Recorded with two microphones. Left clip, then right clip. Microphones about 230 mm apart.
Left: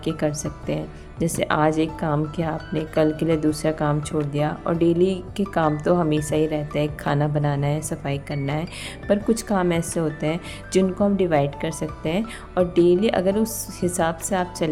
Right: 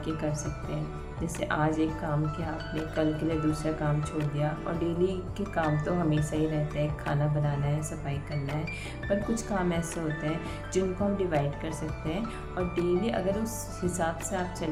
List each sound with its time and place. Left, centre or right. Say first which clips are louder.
0.0 s speech: left 8 dB; left